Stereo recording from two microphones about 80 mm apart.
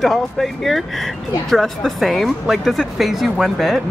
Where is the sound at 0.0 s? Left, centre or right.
Centre.